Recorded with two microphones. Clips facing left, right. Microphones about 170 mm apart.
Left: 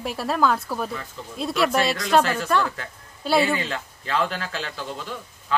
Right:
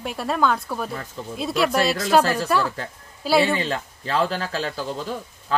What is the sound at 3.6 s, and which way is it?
A man's voice, 35° right (ahead or behind).